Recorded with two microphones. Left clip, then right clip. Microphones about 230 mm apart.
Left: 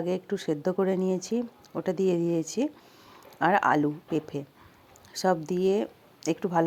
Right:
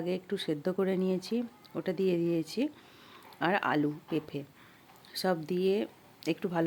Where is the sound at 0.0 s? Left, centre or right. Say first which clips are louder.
Left 4 dB; centre.